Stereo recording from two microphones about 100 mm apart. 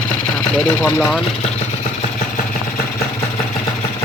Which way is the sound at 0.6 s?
20° left (ahead or behind).